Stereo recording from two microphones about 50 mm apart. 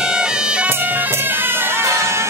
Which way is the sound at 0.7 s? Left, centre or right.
Right.